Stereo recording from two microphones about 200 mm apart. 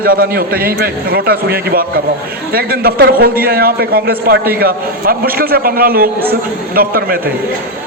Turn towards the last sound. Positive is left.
turn(degrees=-50)  # may be behind; listen again after turning